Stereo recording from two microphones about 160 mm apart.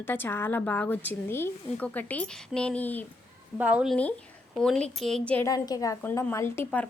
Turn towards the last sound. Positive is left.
turn(degrees=10)  # may be behind; listen again after turning